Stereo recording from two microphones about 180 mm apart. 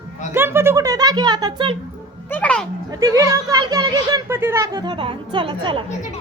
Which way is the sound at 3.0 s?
15° right (ahead or behind).